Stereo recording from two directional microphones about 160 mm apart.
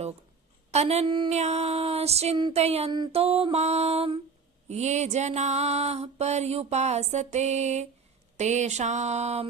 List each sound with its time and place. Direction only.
0.7 s mantra: 40° right (ahead or behind)
1.3 s mantra: 45° right (ahead or behind)
4.7 s music: 45° right (ahead or behind)